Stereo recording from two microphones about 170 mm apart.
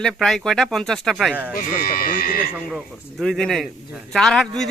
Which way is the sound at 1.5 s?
55° left (ahead or behind).